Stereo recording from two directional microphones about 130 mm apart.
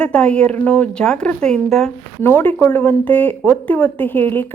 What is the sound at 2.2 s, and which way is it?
Speech, 15° left (ahead or behind).